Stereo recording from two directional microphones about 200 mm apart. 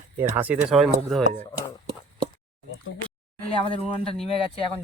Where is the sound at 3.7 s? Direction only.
30° left (ahead or behind).